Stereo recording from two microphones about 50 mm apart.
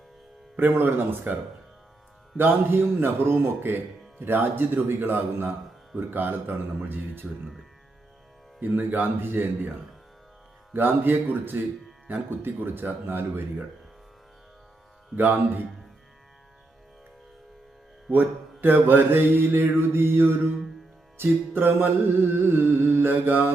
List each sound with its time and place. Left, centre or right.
0.5 s mantra: right
2.4 s mantra: right
8.6 s speech: right
10.8 s mantra: right
15.1 s speech: right
18.1 s mantra: right